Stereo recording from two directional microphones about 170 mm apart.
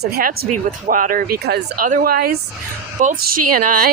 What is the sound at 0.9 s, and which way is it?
Speech, 50° right (ahead or behind).